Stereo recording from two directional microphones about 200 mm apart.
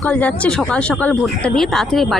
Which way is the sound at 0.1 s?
5° left (ahead or behind).